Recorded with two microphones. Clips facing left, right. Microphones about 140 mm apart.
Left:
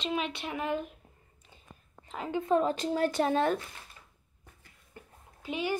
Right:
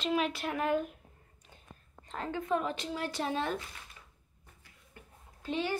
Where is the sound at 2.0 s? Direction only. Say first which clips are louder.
Left 1 dB; 5° left (ahead or behind).